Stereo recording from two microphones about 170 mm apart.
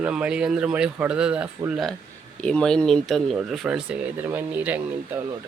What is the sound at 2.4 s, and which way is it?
Speech, 5° left (ahead or behind).